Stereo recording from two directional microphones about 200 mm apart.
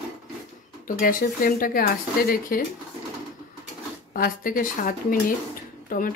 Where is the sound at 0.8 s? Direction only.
45° left (ahead or behind).